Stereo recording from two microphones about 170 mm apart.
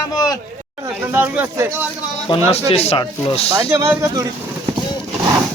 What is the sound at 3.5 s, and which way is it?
Speech, 15° right (ahead or behind).